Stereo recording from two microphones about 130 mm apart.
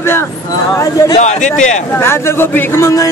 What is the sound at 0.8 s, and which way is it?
Speech, 30° left (ahead or behind).